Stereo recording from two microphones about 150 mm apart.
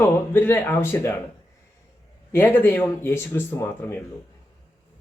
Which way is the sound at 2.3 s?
15° left (ahead or behind).